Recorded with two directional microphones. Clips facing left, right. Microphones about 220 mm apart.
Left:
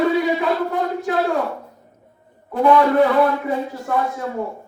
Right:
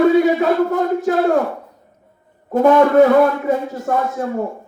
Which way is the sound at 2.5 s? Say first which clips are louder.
Right 3 dB; 45° right (ahead or behind).